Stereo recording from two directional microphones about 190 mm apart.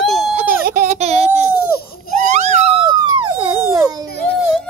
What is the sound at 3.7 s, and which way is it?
Baby cry, 15° right (ahead or behind).